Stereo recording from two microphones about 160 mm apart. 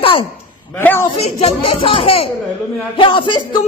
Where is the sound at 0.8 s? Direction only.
15° left (ahead or behind).